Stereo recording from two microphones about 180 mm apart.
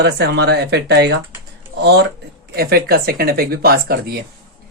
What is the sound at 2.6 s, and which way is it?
Speech, 60° right (ahead or behind).